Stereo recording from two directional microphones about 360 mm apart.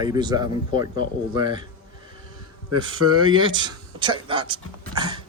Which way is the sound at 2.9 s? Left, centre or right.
Right.